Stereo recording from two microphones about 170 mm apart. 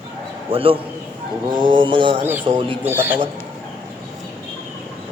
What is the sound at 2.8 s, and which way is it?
Speech, 10° right (ahead or behind).